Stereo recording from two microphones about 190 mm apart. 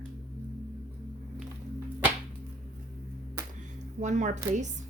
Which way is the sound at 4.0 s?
40° right (ahead or behind).